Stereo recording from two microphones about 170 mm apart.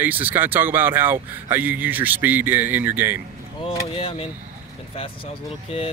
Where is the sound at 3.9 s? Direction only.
35° left (ahead or behind).